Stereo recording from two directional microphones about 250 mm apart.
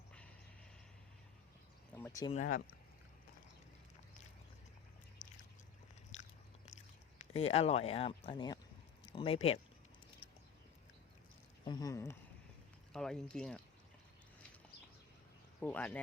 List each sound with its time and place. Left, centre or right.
1.9 s a sound: centre
2.3 s speech: left
5.2 s a sound: left
7.3 s speech: left
11.6 s speech: centre
15.6 s speech: centre